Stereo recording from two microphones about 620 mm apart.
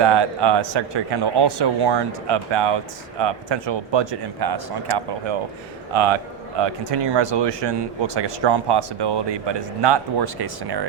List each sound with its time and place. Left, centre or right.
0.0 s a man's voice: right